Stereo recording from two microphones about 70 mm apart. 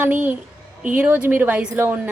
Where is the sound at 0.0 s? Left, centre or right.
Right.